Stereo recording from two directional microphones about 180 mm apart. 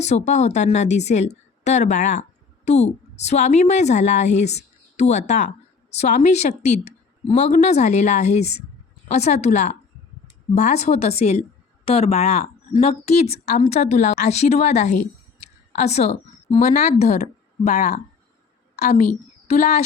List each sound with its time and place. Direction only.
0.0 s a woman's voice: 40° left (ahead or behind)